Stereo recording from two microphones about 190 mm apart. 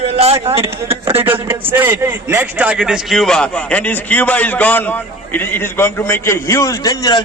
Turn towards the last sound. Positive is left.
turn(degrees=20)  # may be behind; listen again after turning